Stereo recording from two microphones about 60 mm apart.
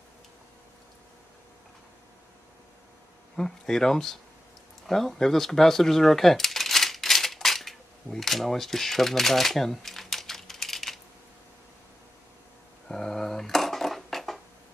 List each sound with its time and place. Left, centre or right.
3.3 s speech: centre
4.8 s coin: centre
12.8 s dishes: centre